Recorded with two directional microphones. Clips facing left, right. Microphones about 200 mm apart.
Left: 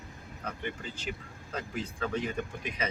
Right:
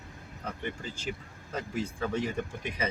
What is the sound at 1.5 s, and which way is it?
Speech, 15° right (ahead or behind).